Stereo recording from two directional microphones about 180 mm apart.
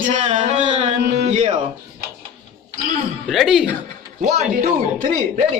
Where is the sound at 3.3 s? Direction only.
Centre (ahead or behind).